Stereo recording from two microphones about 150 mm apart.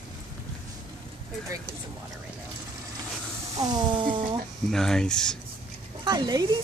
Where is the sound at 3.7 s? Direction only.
30° right (ahead or behind).